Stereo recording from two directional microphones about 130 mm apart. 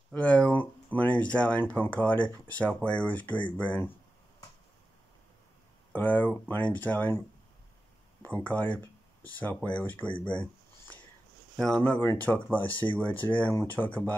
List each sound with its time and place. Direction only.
0.1 s speech: 10° left (ahead or behind)
5.9 s speech: 15° left (ahead or behind)
8.2 s speech: 10° left (ahead or behind)
10.2 s a sound: 10° left (ahead or behind)
11.5 s speech: 5° left (ahead or behind)
12.6 s speech: 40° left (ahead or behind)
12.9 s speech: 15° left (ahead or behind)